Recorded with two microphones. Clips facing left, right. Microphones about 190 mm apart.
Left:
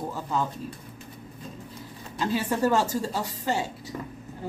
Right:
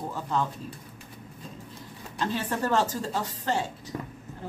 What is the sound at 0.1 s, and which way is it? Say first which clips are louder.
Speech: right 1 dB; 5° left (ahead or behind).